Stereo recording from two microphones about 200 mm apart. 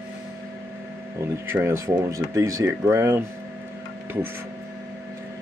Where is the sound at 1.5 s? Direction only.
15° right (ahead or behind).